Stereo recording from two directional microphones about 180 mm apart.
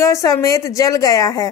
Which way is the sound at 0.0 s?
15° left (ahead or behind).